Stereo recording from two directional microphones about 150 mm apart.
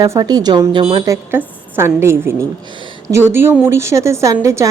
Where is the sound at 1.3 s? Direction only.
15° right (ahead or behind).